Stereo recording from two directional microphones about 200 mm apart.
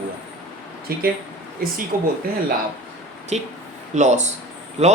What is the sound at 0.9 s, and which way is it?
A man's voice, 50° right (ahead or behind).